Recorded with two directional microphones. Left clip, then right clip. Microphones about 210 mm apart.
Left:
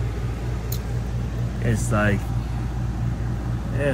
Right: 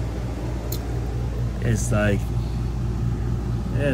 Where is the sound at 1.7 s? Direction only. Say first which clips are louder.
Left 1 dB; 30° left (ahead or behind).